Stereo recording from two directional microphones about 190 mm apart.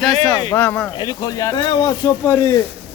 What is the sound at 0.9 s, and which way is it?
Speech, 20° left (ahead or behind).